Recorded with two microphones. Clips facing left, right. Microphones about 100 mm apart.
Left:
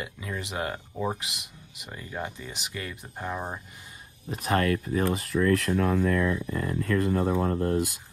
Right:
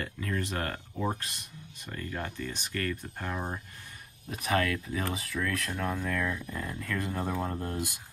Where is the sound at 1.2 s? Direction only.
90° left.